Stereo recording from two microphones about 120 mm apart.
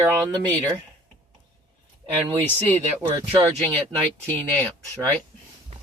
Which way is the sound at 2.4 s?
15° left (ahead or behind).